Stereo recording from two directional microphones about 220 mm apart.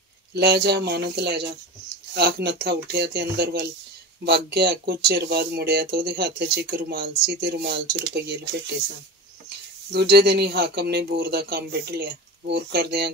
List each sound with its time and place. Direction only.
0.3 s speech: 50° right (ahead or behind)
9.9 s speech: 50° right (ahead or behind)